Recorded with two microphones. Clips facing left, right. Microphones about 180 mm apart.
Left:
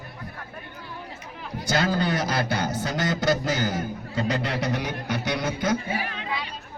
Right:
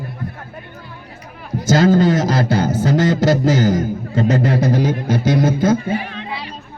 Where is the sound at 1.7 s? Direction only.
40° right (ahead or behind).